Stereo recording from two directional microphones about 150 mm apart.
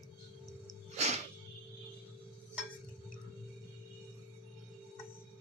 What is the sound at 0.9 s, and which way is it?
Music, 50° right (ahead or behind).